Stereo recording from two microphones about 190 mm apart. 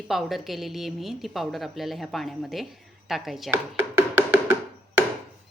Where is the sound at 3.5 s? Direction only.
10° right (ahead or behind).